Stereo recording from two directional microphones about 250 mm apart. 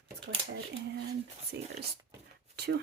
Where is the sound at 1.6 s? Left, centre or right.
Right.